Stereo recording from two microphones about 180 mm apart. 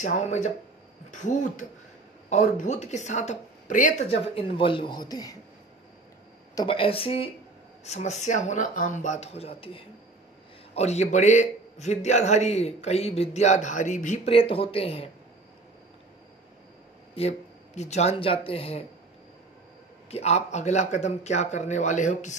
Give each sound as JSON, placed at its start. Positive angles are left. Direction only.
{"t": 0.0, "sound": "a man's voice", "side_deg": 40}
{"t": 4.4, "sound": "speech", "side_deg": 30}
{"t": 6.5, "sound": "a man's voice", "side_deg": 25}
{"t": 17.1, "sound": "speech", "side_deg": 35}
{"t": 20.1, "sound": "a man's voice", "side_deg": 35}